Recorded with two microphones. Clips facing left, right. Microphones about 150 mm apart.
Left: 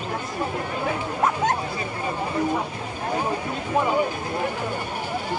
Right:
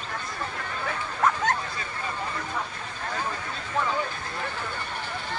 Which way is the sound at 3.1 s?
20° left (ahead or behind).